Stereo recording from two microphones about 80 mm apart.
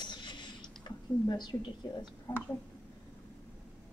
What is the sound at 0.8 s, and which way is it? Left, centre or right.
Speech, left.